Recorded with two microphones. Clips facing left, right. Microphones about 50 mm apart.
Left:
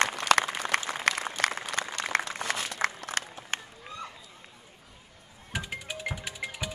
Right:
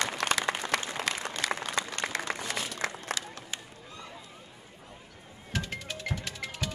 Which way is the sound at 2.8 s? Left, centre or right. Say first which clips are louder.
Left 3 dB; left.